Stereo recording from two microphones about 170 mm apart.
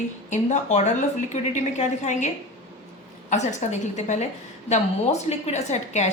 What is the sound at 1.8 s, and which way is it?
A woman's voice, 45° left (ahead or behind).